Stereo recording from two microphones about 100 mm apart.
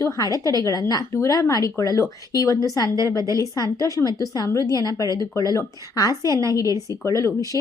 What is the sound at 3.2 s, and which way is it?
Speech, 35° right (ahead or behind).